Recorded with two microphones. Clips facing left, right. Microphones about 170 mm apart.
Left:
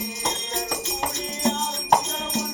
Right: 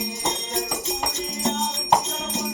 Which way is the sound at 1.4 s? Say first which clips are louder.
Left 1 dB; centre (ahead or behind).